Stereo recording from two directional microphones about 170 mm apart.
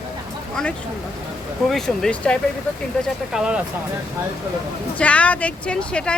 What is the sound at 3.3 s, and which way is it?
Speech, 5° right (ahead or behind).